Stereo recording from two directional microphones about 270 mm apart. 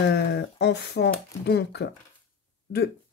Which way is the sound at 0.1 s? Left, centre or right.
Left.